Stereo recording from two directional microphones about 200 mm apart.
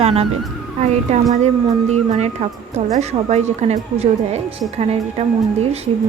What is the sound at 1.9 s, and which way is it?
A woman's voice, 35° right (ahead or behind).